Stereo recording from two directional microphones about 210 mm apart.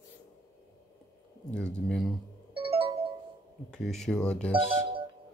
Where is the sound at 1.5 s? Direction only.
5° left (ahead or behind).